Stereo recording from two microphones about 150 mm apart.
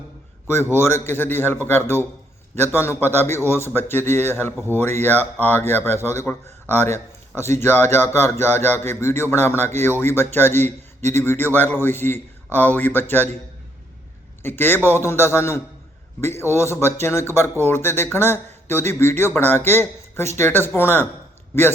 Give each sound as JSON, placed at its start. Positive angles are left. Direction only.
{"t": 0.4, "sound": "speech", "side_deg": 15}
{"t": 14.4, "sound": "speech", "side_deg": 15}